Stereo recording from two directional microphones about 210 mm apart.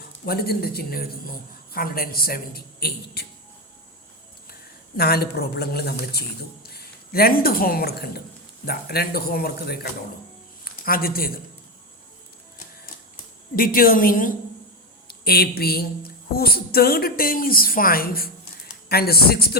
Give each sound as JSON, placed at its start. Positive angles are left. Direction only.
{"t": 0.3, "sound": "a woman's voice", "side_deg": 45}
{"t": 4.9, "sound": "a woman's voice", "side_deg": 50}
{"t": 13.6, "sound": "a woman's voice", "side_deg": 45}